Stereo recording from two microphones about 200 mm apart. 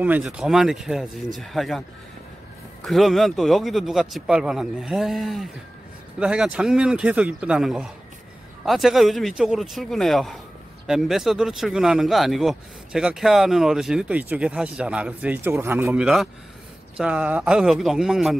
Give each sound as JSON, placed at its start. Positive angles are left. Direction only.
{"t": 0.0, "sound": "speech", "side_deg": -5}
{"t": 2.8, "sound": "speech", "side_deg": 0}